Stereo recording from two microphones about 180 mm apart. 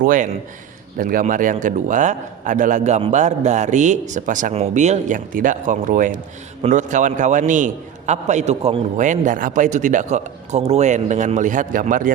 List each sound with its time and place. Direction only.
0.0 s a man's voice: 50° right (ahead or behind)